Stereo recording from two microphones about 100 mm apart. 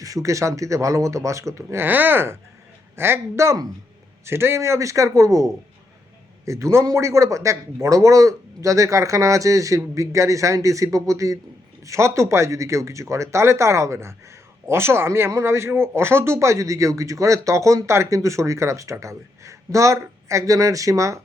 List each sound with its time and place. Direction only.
0.0 s speech: 35° right (ahead or behind)